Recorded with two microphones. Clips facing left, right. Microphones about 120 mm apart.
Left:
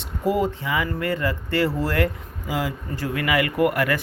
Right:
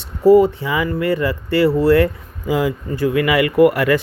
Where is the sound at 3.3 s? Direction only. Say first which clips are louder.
Right 6 dB; 20° right (ahead or behind).